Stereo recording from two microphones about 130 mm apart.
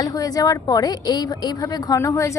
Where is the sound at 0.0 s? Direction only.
30° left (ahead or behind).